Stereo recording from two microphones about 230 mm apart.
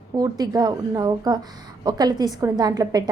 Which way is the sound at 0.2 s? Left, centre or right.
Centre.